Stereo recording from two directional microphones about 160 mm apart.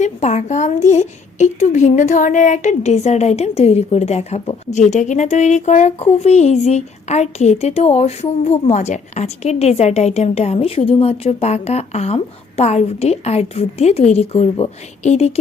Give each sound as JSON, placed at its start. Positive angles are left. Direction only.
{"t": 0.0, "sound": "a woman's voice", "side_deg": 45}